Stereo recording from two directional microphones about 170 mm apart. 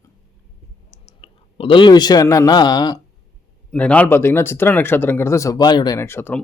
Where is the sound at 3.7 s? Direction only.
5° left (ahead or behind).